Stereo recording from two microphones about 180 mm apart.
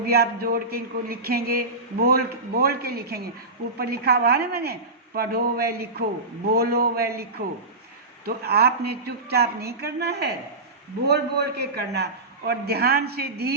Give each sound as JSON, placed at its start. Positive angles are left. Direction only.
{"t": 0.0, "sound": "speech", "side_deg": -60}
{"t": 8.2, "sound": "speech", "side_deg": -60}